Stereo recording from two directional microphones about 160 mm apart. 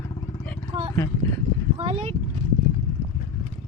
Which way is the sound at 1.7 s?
40° right (ahead or behind).